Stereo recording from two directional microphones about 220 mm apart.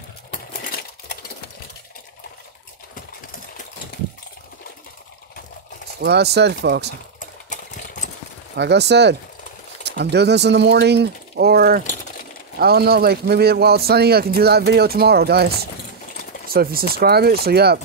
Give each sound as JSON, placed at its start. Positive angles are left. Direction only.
{"t": 2.9, "sound": "a sound", "side_deg": 35}
{"t": 5.9, "sound": "a man's voice", "side_deg": -50}
{"t": 7.2, "sound": "engine", "side_deg": 35}
{"t": 8.5, "sound": "a man's voice", "side_deg": -50}